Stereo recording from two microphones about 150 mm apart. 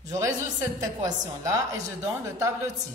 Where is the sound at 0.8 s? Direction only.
25° right (ahead or behind).